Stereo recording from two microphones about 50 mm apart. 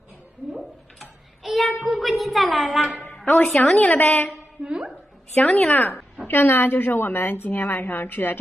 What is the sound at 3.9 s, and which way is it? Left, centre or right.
Speech, left.